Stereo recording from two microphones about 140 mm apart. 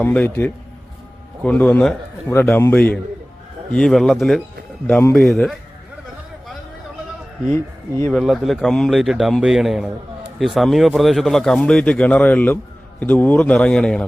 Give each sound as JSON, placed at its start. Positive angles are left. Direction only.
{"t": 0.0, "sound": "a man's voice", "side_deg": 10}
{"t": 4.9, "sound": "a man's voice", "side_deg": 15}
{"t": 7.5, "sound": "speech", "side_deg": 15}
{"t": 8.1, "sound": "a man's voice", "side_deg": 0}